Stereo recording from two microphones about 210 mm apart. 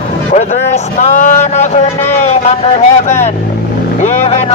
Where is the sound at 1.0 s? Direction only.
35° left (ahead or behind).